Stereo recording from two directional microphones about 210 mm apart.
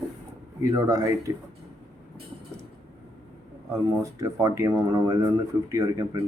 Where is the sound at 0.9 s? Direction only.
15° right (ahead or behind).